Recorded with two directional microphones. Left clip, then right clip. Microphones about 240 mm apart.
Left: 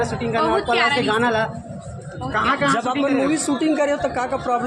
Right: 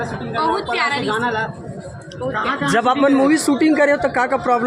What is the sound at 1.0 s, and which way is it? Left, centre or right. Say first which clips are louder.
A man's voice: left 1 dB; left.